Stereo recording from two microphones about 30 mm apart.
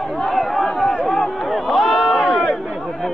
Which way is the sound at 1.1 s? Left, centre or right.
Centre.